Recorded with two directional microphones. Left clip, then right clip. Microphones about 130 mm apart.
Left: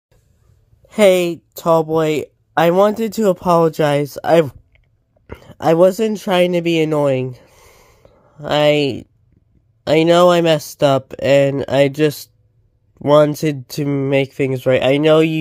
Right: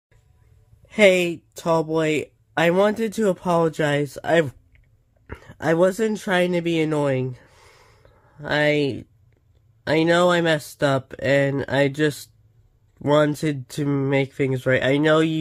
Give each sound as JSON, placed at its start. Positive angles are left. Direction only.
{"t": 0.8, "sound": "speech", "side_deg": 35}